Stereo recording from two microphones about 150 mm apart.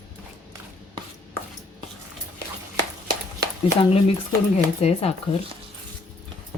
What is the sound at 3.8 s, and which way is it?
Speech, 40° left (ahead or behind).